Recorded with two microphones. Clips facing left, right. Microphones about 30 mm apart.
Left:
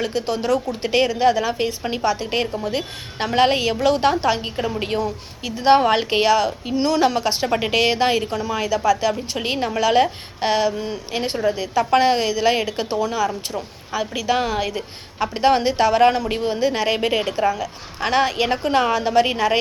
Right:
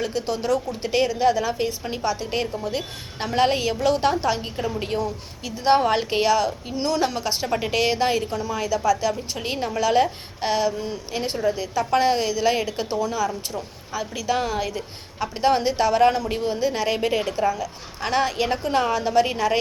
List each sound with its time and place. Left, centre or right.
0.0 s a woman's voice: left